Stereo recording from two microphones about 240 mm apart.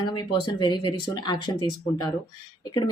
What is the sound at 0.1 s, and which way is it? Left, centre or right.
Speech, centre.